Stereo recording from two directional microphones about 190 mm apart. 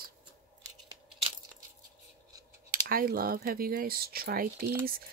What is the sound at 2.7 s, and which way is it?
Speech, 50° right (ahead or behind).